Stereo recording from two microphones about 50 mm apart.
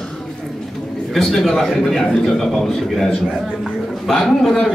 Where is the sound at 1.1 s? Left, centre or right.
Centre.